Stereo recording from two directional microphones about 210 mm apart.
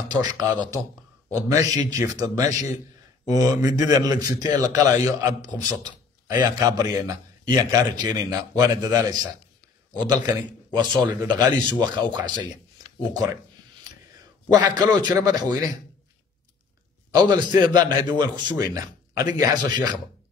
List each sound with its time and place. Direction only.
0.1 s a man's voice: 20° right (ahead or behind)
14.5 s a man's voice: 20° right (ahead or behind)
17.1 s a man's voice: 20° right (ahead or behind)